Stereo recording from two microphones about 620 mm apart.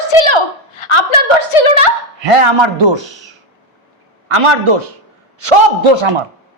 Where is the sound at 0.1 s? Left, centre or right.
Left.